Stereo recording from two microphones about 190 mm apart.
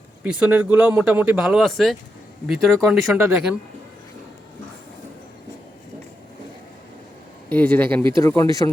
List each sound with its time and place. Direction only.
0.2 s speech: 5° right (ahead or behind)
3.2 s speech: 15° right (ahead or behind)
7.5 s speech: 10° left (ahead or behind)